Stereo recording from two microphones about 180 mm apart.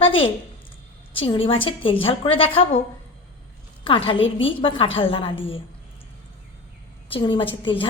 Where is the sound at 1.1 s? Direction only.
30° left (ahead or behind).